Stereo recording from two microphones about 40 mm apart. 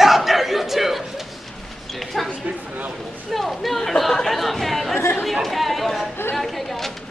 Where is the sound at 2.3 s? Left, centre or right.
Right.